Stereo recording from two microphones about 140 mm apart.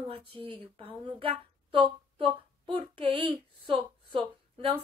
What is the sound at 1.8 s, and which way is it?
Speech, 35° right (ahead or behind).